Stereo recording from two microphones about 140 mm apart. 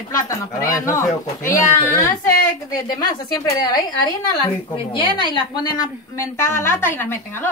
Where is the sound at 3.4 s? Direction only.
30° left (ahead or behind).